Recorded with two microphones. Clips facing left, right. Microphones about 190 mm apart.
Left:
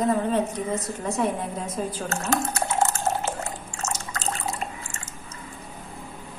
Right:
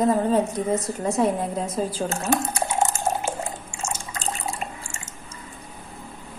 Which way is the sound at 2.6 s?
10° right (ahead or behind).